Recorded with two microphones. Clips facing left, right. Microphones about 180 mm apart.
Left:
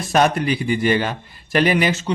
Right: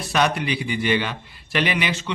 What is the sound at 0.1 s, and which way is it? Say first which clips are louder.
A man's voice: left 5 dB; 45° left (ahead or behind).